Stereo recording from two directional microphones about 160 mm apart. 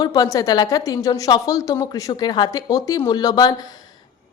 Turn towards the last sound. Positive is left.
turn(degrees=25)  # may be behind; listen again after turning